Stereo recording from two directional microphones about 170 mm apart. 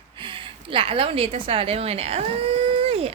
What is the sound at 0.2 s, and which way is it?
A woman's voice, 30° right (ahead or behind).